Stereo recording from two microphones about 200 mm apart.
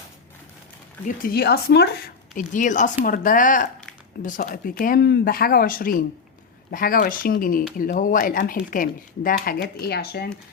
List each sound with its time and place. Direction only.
1.0 s speech: 45° left (ahead or behind)